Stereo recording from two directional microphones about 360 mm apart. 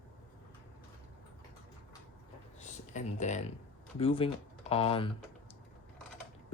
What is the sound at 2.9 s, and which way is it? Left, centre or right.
Speech, centre.